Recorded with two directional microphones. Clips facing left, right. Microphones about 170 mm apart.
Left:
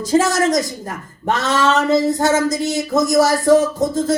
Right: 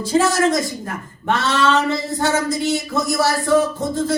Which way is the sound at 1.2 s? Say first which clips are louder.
Left 1 dB; 40° left (ahead or behind).